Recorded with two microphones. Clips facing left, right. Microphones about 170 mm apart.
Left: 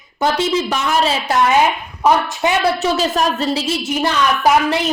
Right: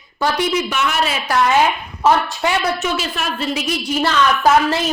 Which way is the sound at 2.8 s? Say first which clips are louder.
Left 6 dB; 35° left (ahead or behind).